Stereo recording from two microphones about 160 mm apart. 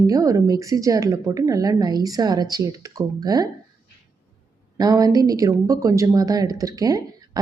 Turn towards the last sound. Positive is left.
turn(degrees=-20)  # may be behind; listen again after turning